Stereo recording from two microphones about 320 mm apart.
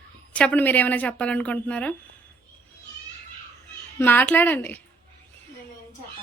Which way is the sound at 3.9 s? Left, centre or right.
Centre.